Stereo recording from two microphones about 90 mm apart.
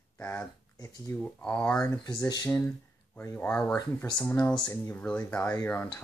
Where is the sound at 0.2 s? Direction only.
25° left (ahead or behind).